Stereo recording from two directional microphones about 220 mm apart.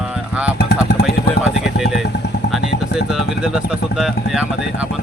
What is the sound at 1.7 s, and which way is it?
Speech, centre (ahead or behind).